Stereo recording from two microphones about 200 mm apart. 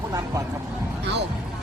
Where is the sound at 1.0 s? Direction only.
60° right (ahead or behind).